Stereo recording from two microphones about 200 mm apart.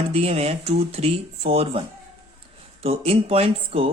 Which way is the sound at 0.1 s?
30° right (ahead or behind).